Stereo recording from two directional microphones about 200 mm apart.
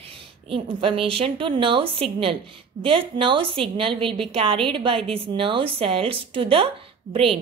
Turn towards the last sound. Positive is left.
turn(degrees=-30)  # may be behind; listen again after turning